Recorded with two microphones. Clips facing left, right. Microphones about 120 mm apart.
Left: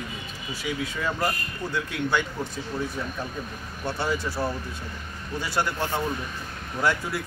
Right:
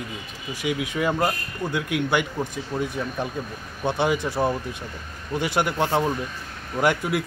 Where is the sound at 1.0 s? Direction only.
15° right (ahead or behind).